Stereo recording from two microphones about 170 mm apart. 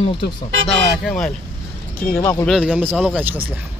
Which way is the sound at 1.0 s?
5° left (ahead or behind).